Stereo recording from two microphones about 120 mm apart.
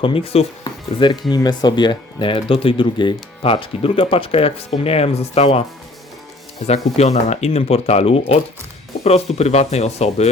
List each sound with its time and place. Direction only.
0.0 s speech: 50° left (ahead or behind)
0.6 s music: 40° left (ahead or behind)
1.3 s speech: 35° left (ahead or behind); by 5.6 s 60° left (ahead or behind)
6.9 s speech: 65° left (ahead or behind)